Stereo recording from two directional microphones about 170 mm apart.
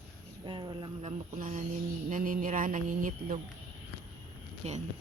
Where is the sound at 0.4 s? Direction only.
30° right (ahead or behind).